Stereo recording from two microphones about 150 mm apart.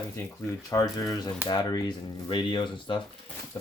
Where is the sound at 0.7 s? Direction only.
20° left (ahead or behind).